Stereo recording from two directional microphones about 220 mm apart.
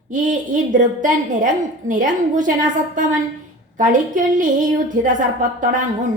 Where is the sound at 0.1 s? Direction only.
35° right (ahead or behind).